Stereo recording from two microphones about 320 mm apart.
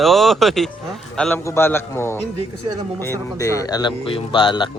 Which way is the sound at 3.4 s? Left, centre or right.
Centre.